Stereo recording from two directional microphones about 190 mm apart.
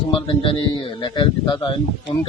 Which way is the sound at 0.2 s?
25° left (ahead or behind).